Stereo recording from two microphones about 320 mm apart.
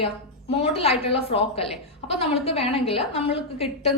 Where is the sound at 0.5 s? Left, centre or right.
Centre.